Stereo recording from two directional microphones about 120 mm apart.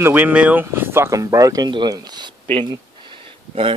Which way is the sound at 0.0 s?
15° right (ahead or behind).